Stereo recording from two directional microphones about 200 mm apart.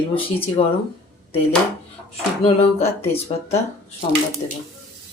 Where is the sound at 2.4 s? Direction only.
30° left (ahead or behind).